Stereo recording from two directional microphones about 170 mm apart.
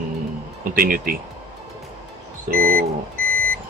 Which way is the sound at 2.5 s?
60° right (ahead or behind).